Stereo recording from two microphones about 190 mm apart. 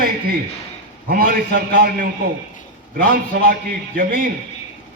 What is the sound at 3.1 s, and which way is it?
A man's voice, 50° right (ahead or behind).